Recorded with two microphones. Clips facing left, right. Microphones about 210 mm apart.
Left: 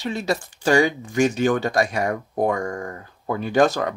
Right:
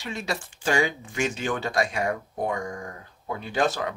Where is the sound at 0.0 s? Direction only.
35° left (ahead or behind).